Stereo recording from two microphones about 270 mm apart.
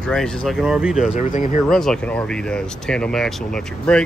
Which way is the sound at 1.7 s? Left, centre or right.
Centre.